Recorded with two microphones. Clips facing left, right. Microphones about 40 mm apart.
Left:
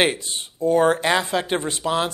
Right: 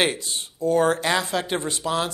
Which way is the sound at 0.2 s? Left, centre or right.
Left.